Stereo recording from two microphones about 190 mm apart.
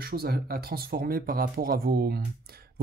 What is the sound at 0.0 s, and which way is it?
Speech, 55° right (ahead or behind).